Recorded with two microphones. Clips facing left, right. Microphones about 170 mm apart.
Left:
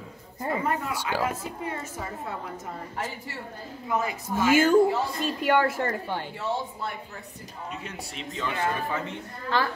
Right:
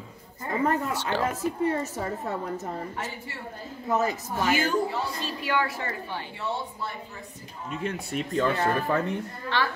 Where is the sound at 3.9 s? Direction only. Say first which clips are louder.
Right 3 dB; 40° right (ahead or behind).